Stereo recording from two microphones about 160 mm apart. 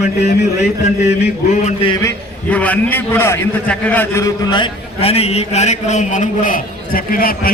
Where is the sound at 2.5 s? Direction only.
10° left (ahead or behind); by 7.4 s 65° left (ahead or behind).